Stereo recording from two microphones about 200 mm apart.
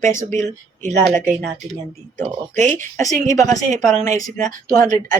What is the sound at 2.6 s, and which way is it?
Speech, 10° left (ahead or behind).